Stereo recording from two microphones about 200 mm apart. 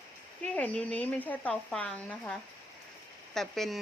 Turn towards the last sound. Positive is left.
turn(degrees=0)  # may be behind; listen again after turning